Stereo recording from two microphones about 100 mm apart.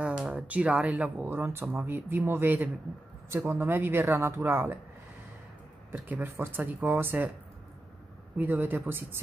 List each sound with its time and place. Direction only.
0.0 s speech: 10° right (ahead or behind)
5.9 s speech: 15° right (ahead or behind)
8.4 s speech: 20° right (ahead or behind)